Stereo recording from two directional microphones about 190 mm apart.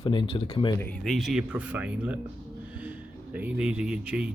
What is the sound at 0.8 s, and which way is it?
Speech, 5° left (ahead or behind).